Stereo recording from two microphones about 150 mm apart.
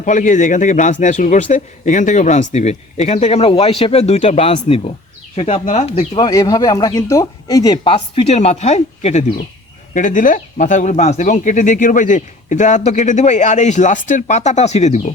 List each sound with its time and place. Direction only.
0.0 s speech: 55° left (ahead or behind); by 6.2 s 40° left (ahead or behind)
6.2 s speech: 25° left (ahead or behind)
7.9 s speech: 40° left (ahead or behind)
9.9 s speech: 60° left (ahead or behind)